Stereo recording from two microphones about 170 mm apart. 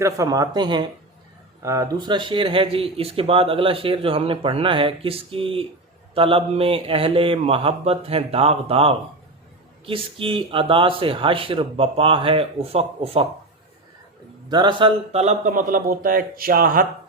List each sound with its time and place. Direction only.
0.0 s speech: 20° right (ahead or behind)
14.5 s speech: 30° right (ahead or behind); by 16.8 s 60° right (ahead or behind)